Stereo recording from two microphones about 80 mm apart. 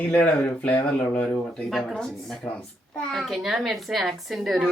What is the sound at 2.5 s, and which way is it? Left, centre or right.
Speech, centre.